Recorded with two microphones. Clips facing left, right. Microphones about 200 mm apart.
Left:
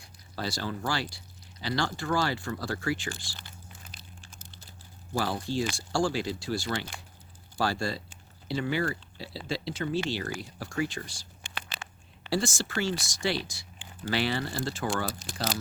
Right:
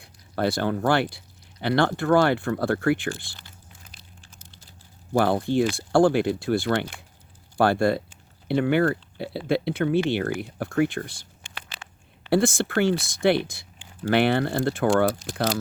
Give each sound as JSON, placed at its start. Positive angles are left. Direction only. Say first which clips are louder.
{"t": 0.0, "sound": "speech", "louder": "right 10 dB", "side_deg": -60}
{"t": 5.1, "sound": "speech", "louder": "right 9 dB", "side_deg": -60}
{"t": 12.3, "sound": "speech", "louder": "right 8 dB", "side_deg": -55}